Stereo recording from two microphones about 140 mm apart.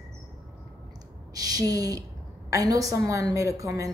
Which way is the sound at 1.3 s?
25° right (ahead or behind).